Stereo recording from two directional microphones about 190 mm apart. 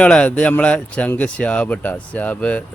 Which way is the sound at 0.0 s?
5° left (ahead or behind).